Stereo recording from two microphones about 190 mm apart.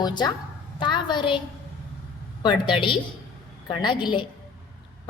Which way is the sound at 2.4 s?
25° left (ahead or behind).